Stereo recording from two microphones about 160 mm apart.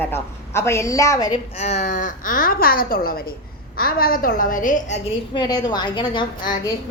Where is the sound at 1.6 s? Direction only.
45° left (ahead or behind).